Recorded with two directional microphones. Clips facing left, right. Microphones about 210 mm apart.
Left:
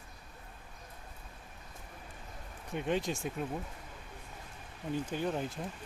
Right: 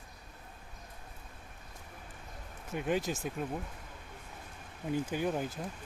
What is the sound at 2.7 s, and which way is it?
Speech, 5° right (ahead or behind).